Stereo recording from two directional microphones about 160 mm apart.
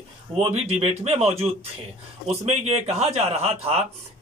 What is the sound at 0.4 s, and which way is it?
Speech, 40° right (ahead or behind).